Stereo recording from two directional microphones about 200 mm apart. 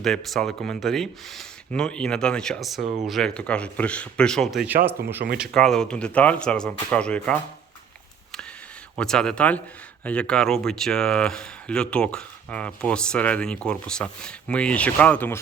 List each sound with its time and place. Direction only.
0.0 s speech: centre (ahead or behind)
2.8 s speech: 35° right (ahead or behind)
3.1 s speech: 5° left (ahead or behind)
9.0 s speech: 5° left (ahead or behind)